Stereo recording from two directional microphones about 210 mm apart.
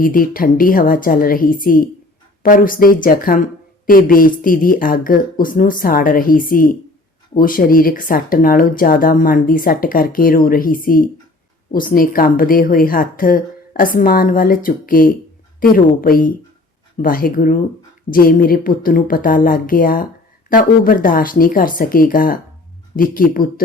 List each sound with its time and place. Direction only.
0.0 s a woman's voice: 40° left (ahead or behind)